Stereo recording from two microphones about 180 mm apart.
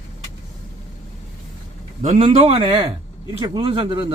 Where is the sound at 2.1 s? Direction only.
30° right (ahead or behind).